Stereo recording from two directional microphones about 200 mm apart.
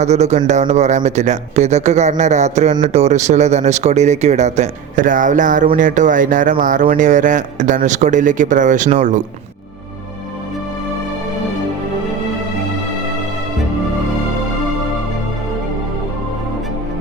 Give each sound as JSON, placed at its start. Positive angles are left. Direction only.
{"t": 0.0, "sound": "speech", "side_deg": -35}